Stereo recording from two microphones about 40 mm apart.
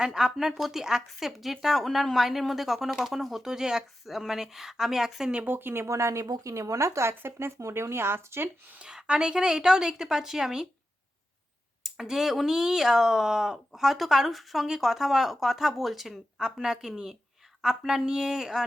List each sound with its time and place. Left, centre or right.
0.0 s speech: centre
4.0 s speech: centre
5.5 s speech: right
7.0 s speech: right
8.8 s speech: right
11.8 s speech: centre